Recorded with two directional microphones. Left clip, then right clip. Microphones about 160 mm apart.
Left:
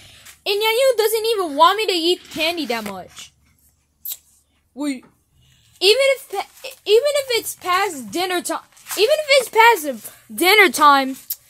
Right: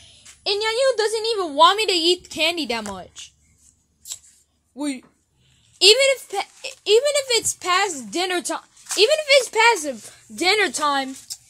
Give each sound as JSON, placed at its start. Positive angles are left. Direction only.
{"t": 0.0, "sound": "speech", "side_deg": 10}
{"t": 1.5, "sound": "speech", "side_deg": 0}
{"t": 4.7, "sound": "speech", "side_deg": 0}
{"t": 7.9, "sound": "speech", "side_deg": 5}
{"t": 9.6, "sound": "speech", "side_deg": 15}
{"t": 10.6, "sound": "speech", "side_deg": 45}